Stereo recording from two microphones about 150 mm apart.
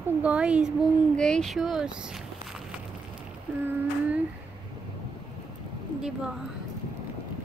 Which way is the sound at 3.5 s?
10° right (ahead or behind).